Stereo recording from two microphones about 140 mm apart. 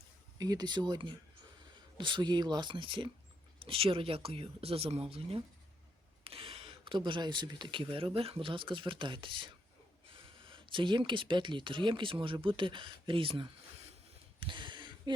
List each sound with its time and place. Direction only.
0.3 s speech: 30° right (ahead or behind); by 5.0 s 45° right (ahead or behind)
6.2 s speech: 40° right (ahead or behind)
14.3 s a sound: 35° right (ahead or behind)